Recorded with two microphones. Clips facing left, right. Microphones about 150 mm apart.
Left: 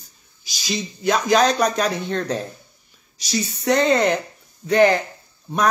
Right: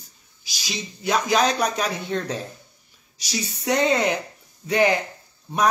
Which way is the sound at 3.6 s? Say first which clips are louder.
Left 3 dB; 10° right (ahead or behind).